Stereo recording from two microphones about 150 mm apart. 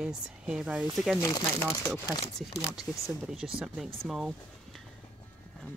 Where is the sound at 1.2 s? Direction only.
25° left (ahead or behind).